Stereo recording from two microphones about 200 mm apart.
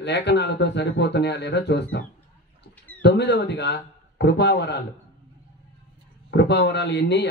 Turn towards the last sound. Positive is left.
turn(degrees=60)  # may be behind; listen again after turning